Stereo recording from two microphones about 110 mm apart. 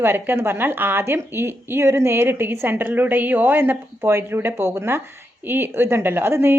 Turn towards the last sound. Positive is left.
turn(degrees=-20)  # may be behind; listen again after turning